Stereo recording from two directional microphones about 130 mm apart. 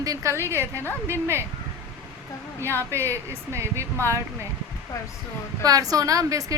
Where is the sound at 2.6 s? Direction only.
20° right (ahead or behind).